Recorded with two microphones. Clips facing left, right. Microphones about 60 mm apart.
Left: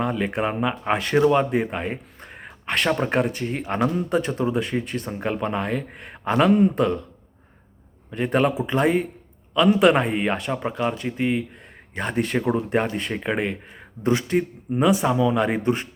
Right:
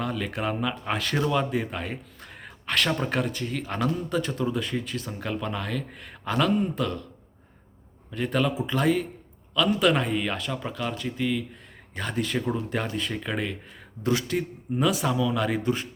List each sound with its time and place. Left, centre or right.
0.0 s speech: left
5.3 s speech: left
8.1 s speech: left
9.7 s speech: left
11.5 s a sound: left
12.1 s speech: left
15.5 s speech: left